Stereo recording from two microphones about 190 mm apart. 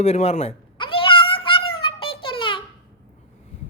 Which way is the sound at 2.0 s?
25° left (ahead or behind).